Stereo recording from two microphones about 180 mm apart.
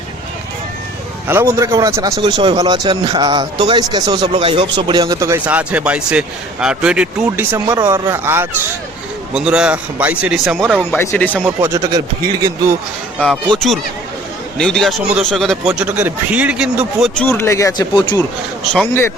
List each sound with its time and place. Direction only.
1.3 s a man's voice: 15° right (ahead or behind)
7.5 s a man's voice: 15° right (ahead or behind)
10.9 s speech: 15° left (ahead or behind)
11.4 s a man's voice: 15° right (ahead or behind)
14.6 s speech: centre (ahead or behind)
17.2 s speech: 15° left (ahead or behind)
18.7 s speech: 10° left (ahead or behind)